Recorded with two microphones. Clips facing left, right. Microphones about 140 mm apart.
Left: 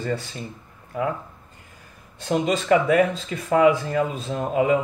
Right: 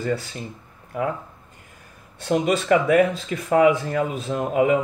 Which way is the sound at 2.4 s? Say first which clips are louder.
Even; 45° right (ahead or behind).